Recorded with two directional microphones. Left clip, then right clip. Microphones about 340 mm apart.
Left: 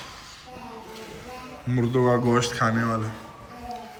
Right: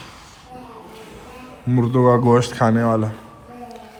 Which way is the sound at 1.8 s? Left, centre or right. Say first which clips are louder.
Right 6 dB; centre.